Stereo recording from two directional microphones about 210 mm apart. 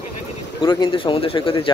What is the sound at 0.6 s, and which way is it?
Speech, 25° left (ahead or behind).